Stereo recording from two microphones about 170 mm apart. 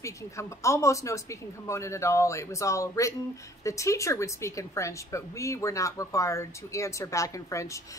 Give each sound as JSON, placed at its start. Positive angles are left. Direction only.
{"t": 0.0, "sound": "a woman's voice", "side_deg": 15}